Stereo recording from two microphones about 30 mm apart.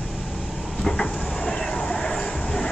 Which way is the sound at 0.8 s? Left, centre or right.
Left.